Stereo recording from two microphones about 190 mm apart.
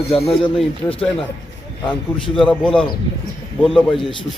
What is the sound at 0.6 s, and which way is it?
Speech, 5° left (ahead or behind).